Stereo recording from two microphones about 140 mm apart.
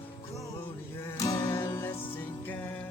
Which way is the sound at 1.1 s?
25° left (ahead or behind).